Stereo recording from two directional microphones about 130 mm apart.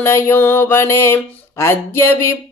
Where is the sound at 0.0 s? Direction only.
15° left (ahead or behind).